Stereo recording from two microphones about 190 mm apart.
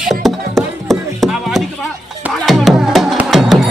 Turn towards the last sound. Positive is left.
turn(degrees=0)  # may be behind; listen again after turning